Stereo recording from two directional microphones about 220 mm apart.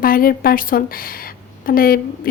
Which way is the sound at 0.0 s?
40° left (ahead or behind).